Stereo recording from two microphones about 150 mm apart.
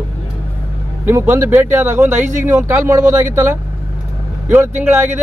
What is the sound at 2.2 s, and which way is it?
Speech, 55° right (ahead or behind).